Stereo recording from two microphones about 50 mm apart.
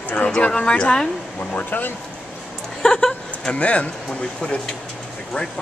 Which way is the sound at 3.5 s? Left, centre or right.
Left.